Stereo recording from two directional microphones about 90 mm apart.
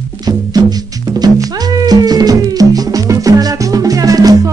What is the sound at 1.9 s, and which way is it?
Music, 45° right (ahead or behind).